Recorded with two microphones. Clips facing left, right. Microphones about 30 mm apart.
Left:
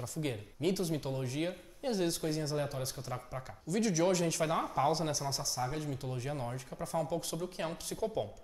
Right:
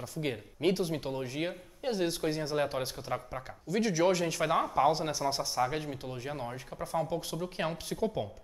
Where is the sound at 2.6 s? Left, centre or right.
Right; by 5.3 s centre.